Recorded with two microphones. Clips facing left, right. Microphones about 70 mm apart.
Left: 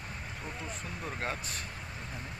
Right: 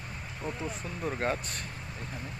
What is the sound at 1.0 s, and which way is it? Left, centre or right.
Speech, centre.